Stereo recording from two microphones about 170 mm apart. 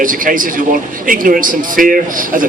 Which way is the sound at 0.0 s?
50° right (ahead or behind).